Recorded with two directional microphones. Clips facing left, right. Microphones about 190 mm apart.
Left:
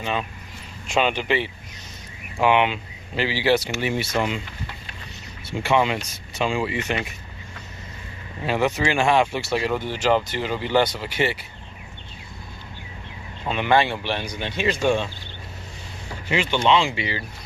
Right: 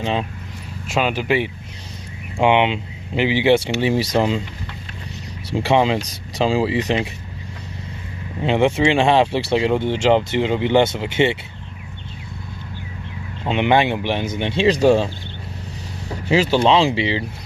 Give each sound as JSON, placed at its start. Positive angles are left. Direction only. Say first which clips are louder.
{"t": 0.0, "sound": "speech", "louder": "right 4 dB", "side_deg": -25}
{"t": 0.9, "sound": "speech", "louder": "right 2 dB", "side_deg": -5}
{"t": 2.4, "sound": "speech", "louder": "right 3 dB", "side_deg": -20}
{"t": 5.5, "sound": "speech", "louder": "right 4 dB", "side_deg": -30}
{"t": 8.4, "sound": "speech", "louder": "right 6 dB", "side_deg": -25}
{"t": 13.5, "sound": "speech", "louder": "right 3 dB", "side_deg": -20}
{"t": 16.3, "sound": "speech", "louder": "right 5 dB", "side_deg": -35}